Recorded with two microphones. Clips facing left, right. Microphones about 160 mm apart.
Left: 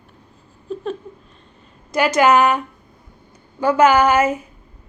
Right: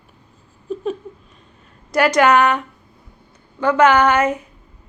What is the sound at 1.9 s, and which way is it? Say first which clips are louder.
Speech: right 1 dB; centre (ahead or behind).